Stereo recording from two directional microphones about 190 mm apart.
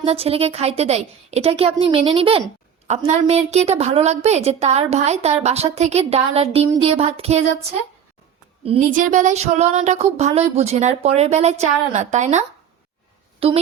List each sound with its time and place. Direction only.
0.0 s a woman's voice: 30° right (ahead or behind)
8.6 s a woman's voice: 30° right (ahead or behind)
8.9 s a woman's voice: 40° right (ahead or behind)